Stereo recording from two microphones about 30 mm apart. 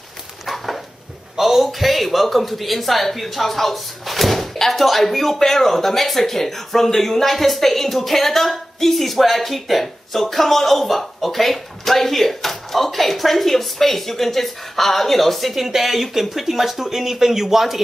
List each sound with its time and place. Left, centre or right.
1.4 s speech: centre